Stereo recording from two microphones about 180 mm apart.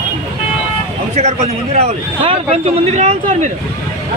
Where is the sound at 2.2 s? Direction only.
30° right (ahead or behind).